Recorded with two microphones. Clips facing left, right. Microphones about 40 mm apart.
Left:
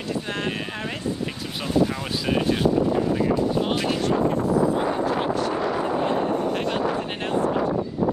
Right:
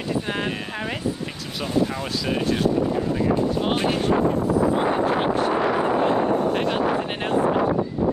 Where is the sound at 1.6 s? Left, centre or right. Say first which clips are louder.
Left 1 dB; centre.